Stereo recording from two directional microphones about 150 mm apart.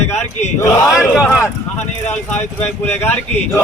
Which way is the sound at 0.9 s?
Centre (ahead or behind).